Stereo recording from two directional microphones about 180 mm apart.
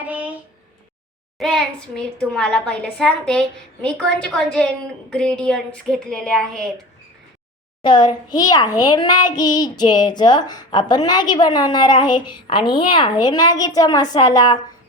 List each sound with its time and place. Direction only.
0.0 s a sound: 10° right (ahead or behind)
1.4 s a child's voice: centre (ahead or behind)
7.8 s a child's voice: 25° left (ahead or behind)